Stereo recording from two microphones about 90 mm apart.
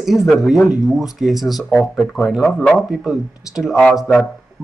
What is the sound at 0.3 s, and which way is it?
Speech, 5° right (ahead or behind).